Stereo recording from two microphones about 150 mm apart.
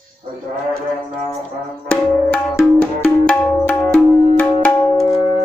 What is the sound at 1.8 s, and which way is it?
Music, 10° left (ahead or behind).